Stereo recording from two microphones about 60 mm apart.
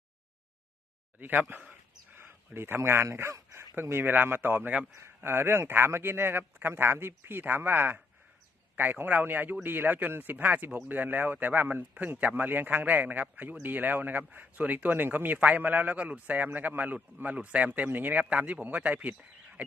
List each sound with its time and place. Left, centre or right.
1.2 s speech: right
2.1 s a sound: right
3.8 s a man's voice: right